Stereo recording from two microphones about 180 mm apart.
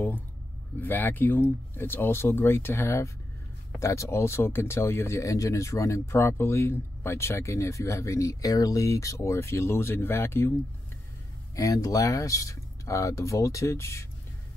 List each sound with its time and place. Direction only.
0.7 s speech: 10° left (ahead or behind)